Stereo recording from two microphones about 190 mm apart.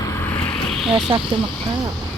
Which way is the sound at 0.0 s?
15° left (ahead or behind).